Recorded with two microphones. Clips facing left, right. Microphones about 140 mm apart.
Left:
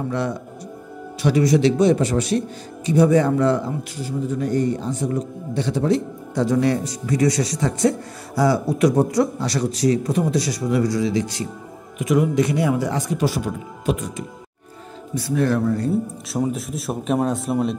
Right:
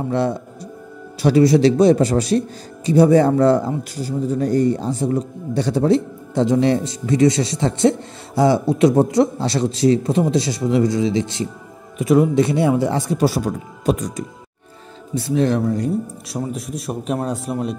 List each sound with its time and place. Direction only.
0.1 s a man's voice: 30° right (ahead or behind)
15.1 s a man's voice: 25° right (ahead or behind)
16.3 s a man's voice: centre (ahead or behind)